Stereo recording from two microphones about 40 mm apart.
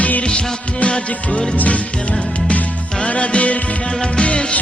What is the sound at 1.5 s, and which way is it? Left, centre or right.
Music, left.